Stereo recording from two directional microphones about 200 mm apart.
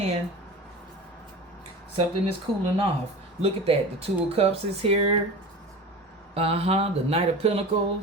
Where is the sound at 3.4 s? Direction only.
30° right (ahead or behind).